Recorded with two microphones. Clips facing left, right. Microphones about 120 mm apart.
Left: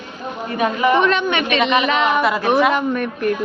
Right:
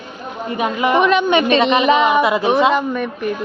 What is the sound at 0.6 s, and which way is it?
Speech, 20° right (ahead or behind).